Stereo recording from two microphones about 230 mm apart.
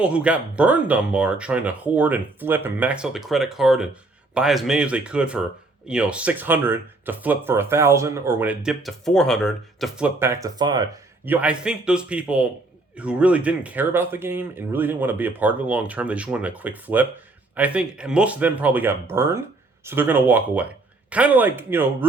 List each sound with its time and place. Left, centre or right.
0.0 s speech: centre
11.3 s speech: centre